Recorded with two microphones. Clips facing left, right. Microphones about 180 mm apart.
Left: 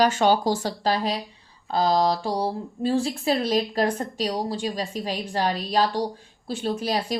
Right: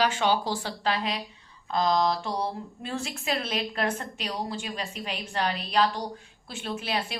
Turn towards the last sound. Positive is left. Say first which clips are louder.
# left 6 dB
turn(degrees=35)  # may be behind; listen again after turning